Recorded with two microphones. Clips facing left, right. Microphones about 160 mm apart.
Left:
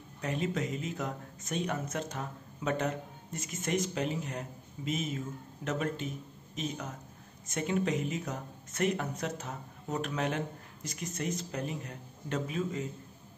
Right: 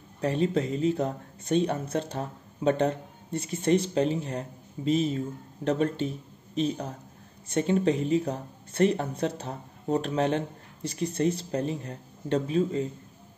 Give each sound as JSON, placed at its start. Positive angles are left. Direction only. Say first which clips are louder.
{"t": 0.2, "sound": "speech", "louder": "right 7 dB", "side_deg": -30}